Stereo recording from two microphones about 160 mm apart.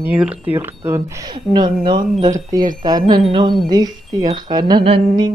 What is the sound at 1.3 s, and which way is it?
Speech, 30° right (ahead or behind).